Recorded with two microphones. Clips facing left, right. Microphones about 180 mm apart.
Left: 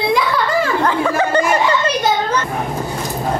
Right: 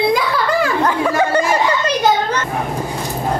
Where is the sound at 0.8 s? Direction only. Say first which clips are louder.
Even; 10° right (ahead or behind).